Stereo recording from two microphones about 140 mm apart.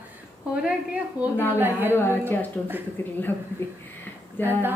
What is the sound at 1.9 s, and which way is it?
A woman's voice, 15° left (ahead or behind).